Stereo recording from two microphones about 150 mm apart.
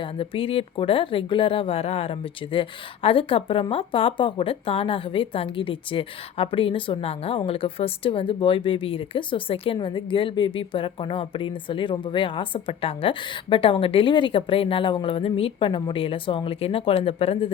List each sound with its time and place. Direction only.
0.0 s a woman's voice: 40° left (ahead or behind)